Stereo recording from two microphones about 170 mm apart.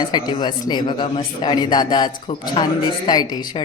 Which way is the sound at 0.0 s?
25° left (ahead or behind).